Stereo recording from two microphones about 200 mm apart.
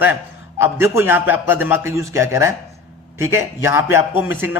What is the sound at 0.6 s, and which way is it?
A man's voice, 10° right (ahead or behind).